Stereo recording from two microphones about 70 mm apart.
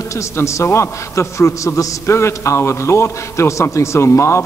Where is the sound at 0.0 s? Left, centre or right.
Left.